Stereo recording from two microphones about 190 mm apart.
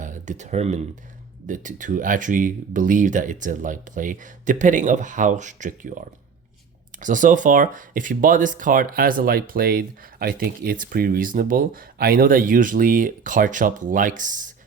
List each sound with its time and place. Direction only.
0.0 s speech: 40° right (ahead or behind)
7.0 s speech: 45° right (ahead or behind)